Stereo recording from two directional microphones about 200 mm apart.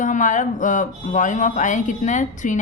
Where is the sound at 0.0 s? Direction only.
40° left (ahead or behind).